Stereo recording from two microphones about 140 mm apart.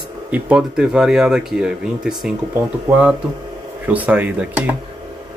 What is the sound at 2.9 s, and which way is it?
Speech, 20° right (ahead or behind).